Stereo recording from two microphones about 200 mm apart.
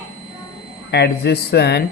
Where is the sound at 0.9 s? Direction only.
55° left (ahead or behind).